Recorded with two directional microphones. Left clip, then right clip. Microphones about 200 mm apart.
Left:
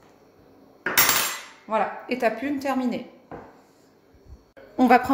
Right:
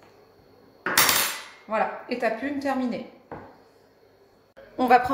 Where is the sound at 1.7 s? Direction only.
40° left (ahead or behind).